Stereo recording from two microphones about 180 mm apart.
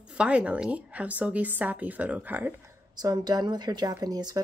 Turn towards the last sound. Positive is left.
turn(degrees=-20)  # may be behind; listen again after turning